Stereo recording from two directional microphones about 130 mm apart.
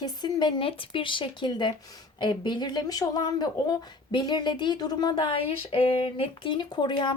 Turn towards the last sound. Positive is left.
turn(degrees=35)  # may be behind; listen again after turning